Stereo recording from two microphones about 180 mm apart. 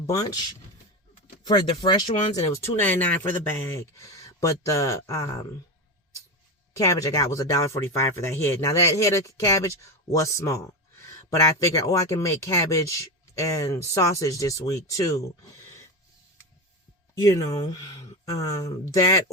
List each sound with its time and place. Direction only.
1.5 s speech: 25° left (ahead or behind)
6.7 s speech: 15° left (ahead or behind)
17.2 s speech: 20° left (ahead or behind)